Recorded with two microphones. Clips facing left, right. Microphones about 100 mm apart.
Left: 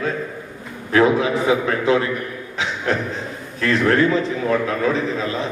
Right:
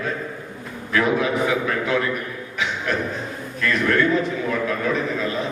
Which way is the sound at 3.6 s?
30° left (ahead or behind).